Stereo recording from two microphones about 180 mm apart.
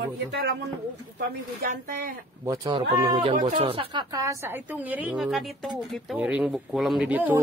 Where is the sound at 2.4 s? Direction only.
20° right (ahead or behind).